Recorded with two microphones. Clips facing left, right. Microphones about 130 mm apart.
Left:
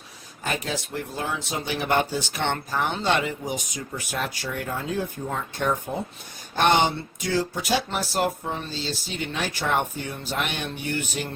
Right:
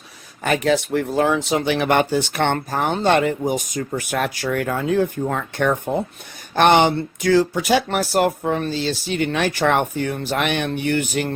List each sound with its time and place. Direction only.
0.4 s speech: 70° right (ahead or behind)